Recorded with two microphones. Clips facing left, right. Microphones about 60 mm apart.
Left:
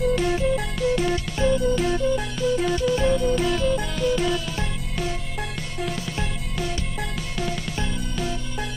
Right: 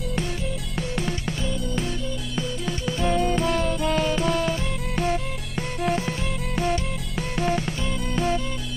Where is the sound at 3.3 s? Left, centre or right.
Right.